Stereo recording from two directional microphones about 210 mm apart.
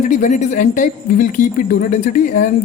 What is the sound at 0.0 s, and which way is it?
Speech, 35° left (ahead or behind).